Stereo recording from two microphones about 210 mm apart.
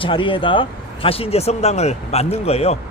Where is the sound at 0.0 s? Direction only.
25° left (ahead or behind).